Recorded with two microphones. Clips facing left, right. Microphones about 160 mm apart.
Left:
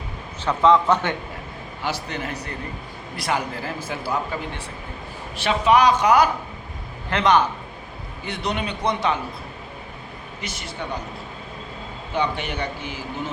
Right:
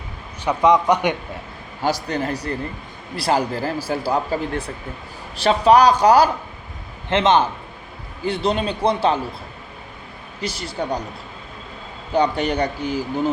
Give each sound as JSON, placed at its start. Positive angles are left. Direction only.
{"t": 0.4, "sound": "a man's voice", "side_deg": -15}
{"t": 1.8, "sound": "a man's voice", "side_deg": -40}
{"t": 10.4, "sound": "speech", "side_deg": -35}
{"t": 12.1, "sound": "speech", "side_deg": -40}